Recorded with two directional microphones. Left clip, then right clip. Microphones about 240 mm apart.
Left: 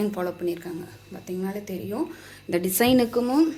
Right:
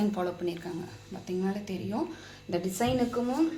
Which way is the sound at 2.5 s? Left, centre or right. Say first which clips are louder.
Left 7 dB; left.